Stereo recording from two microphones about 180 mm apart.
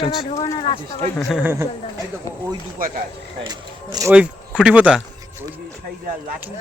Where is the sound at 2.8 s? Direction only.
50° right (ahead or behind).